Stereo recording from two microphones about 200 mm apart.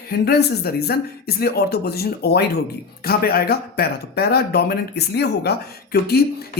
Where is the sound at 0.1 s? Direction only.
50° left (ahead or behind).